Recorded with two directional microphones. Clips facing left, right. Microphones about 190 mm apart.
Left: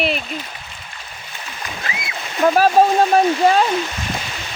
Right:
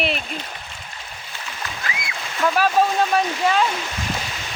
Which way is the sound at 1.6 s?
25° left (ahead or behind).